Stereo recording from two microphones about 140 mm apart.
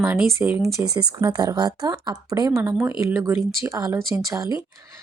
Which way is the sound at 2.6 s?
15° right (ahead or behind).